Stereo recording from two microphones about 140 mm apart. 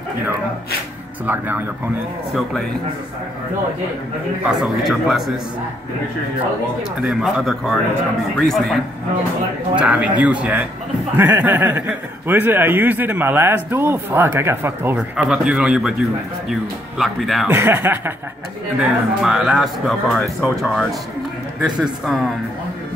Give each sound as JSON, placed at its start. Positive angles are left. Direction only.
{"t": 1.2, "sound": "speech", "side_deg": -15}
{"t": 4.5, "sound": "speech", "side_deg": -5}
{"t": 6.8, "sound": "speech", "side_deg": -5}
{"t": 9.8, "sound": "speech", "side_deg": -10}
{"t": 15.0, "sound": "speech", "side_deg": -5}
{"t": 17.5, "sound": "speech", "side_deg": -15}
{"t": 18.8, "sound": "speech", "side_deg": -5}